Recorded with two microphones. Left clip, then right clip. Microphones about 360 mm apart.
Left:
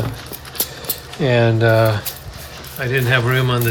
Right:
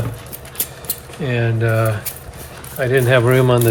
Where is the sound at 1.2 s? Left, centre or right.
Centre.